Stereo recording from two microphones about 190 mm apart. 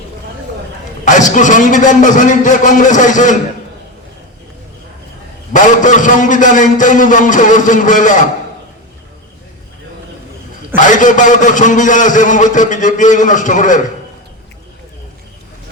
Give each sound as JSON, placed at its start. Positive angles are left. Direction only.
{"t": 1.0, "sound": "a man's voice", "side_deg": 40}
{"t": 5.6, "sound": "a man's voice", "side_deg": 40}
{"t": 10.8, "sound": "a man's voice", "side_deg": 40}